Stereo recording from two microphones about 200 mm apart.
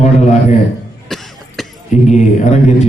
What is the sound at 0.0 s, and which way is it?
Speech, 35° left (ahead or behind).